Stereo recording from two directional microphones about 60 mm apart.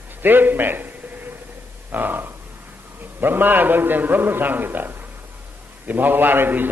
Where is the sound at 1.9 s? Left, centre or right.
Right.